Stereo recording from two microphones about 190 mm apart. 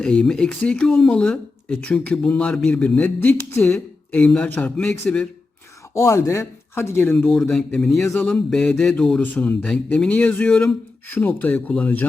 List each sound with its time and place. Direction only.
0.0 s a man's voice: 5° left (ahead or behind)